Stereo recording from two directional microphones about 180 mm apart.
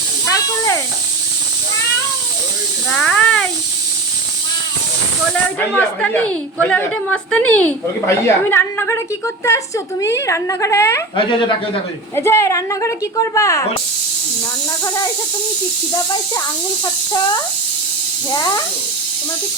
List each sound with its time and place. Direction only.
0.3 s snake: 15° left (ahead or behind)
2.9 s a sound: 5° left (ahead or behind)
5.5 s a woman's voice: 10° left (ahead or behind)
11.2 s speech: 25° left (ahead or behind)
12.1 s a woman's voice: 15° left (ahead or behind)
18.3 s speech: 20° left (ahead or behind)